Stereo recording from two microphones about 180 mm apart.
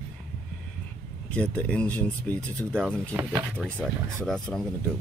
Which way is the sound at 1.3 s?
5° left (ahead or behind).